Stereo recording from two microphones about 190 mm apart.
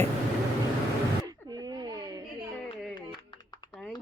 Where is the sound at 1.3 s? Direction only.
20° right (ahead or behind).